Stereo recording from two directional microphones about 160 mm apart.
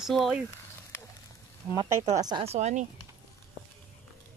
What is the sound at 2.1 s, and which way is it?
Speech, 25° right (ahead or behind).